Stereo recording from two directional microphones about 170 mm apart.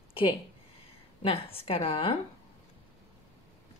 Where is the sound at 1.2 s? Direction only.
35° left (ahead or behind).